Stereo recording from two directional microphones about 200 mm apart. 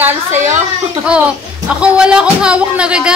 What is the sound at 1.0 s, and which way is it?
Speech, 5° right (ahead or behind).